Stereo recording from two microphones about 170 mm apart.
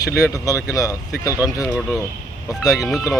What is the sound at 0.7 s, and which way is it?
Speech, 20° left (ahead or behind).